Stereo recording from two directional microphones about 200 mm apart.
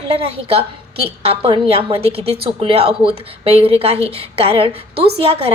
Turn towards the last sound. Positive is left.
turn(degrees=-30)  # may be behind; listen again after turning